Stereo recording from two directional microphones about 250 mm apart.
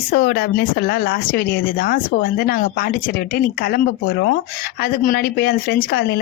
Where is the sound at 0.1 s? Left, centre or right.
Left.